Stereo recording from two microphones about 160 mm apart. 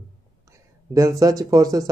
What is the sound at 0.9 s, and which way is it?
Speech, 20° right (ahead or behind).